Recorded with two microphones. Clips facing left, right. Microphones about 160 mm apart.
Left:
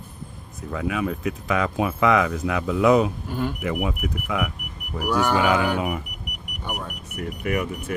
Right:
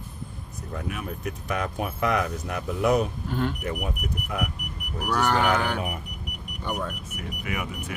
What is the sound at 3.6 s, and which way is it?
Speech, 90° left.